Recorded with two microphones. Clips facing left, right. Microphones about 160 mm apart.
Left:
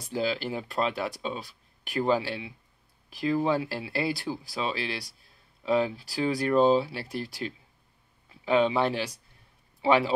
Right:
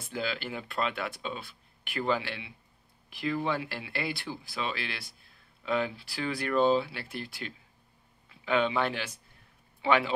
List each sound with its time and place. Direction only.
0.0 s speech: 35° left (ahead or behind)